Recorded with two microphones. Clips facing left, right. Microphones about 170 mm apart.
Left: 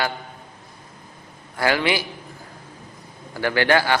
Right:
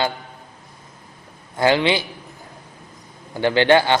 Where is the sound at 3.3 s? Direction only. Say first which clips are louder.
Right 4 dB; 20° right (ahead or behind).